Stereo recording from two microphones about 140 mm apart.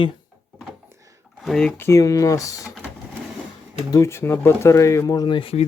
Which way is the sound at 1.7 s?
20° left (ahead or behind).